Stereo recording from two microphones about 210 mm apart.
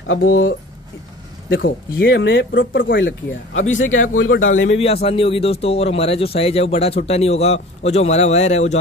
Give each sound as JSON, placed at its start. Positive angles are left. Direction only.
{"t": 0.0, "sound": "speech", "side_deg": 65}
{"t": 1.5, "sound": "speech", "side_deg": 60}
{"t": 4.7, "sound": "speech", "side_deg": 30}